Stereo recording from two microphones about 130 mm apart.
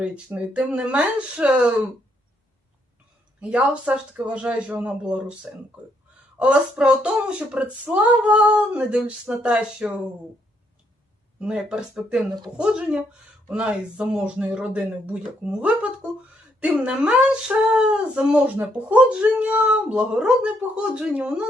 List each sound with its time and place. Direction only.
0.0 s speech: 10° right (ahead or behind)
3.4 s speech: 10° right (ahead or behind)
11.3 s speech: 5° right (ahead or behind)